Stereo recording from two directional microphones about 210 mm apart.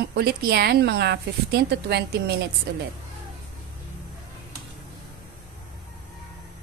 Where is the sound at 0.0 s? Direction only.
50° right (ahead or behind).